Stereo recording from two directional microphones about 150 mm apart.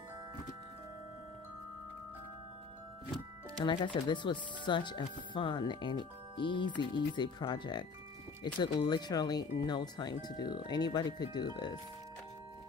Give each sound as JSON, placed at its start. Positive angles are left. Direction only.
{"t": 3.6, "sound": "speech", "side_deg": 30}